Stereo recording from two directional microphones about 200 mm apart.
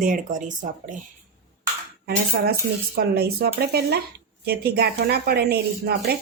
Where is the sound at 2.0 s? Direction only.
55° right (ahead or behind).